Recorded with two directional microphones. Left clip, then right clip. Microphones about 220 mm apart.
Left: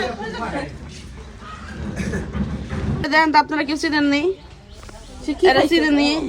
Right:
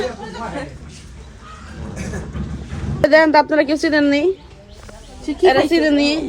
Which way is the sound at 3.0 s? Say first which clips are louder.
Right 4 dB; 5° left (ahead or behind).